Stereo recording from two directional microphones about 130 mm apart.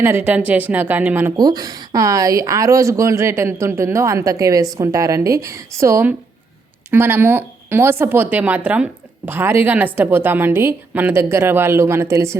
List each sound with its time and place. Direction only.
0.0 s a woman's voice: 15° right (ahead or behind)
1.4 s a woman's voice: 30° right (ahead or behind)